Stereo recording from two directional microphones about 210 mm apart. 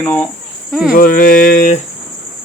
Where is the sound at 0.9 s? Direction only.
40° left (ahead or behind).